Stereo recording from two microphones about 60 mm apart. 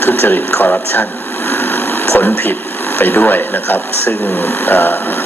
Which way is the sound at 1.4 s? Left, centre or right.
Left.